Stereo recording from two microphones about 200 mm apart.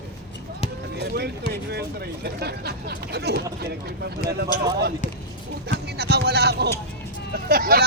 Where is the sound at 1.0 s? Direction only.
55° right (ahead or behind).